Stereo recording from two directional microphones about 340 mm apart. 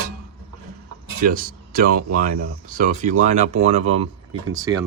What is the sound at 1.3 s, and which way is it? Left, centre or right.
Speech, right.